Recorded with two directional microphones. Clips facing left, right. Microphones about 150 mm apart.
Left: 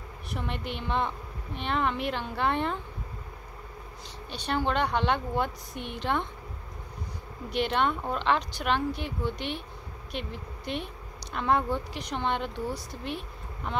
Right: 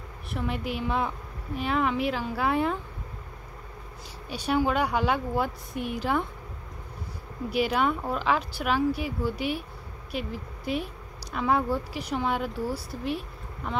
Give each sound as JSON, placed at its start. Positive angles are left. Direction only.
{"t": 0.3, "sound": "a woman's voice", "side_deg": 0}
{"t": 4.3, "sound": "a woman's voice", "side_deg": -10}
{"t": 7.4, "sound": "a woman's voice", "side_deg": -5}